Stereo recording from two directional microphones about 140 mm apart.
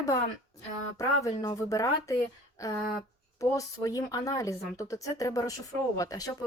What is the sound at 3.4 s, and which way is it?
Speech, 25° left (ahead or behind).